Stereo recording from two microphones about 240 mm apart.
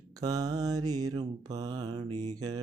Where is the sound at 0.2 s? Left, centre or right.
Centre.